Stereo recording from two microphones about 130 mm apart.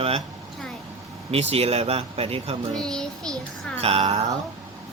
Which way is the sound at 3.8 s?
50° right (ahead or behind).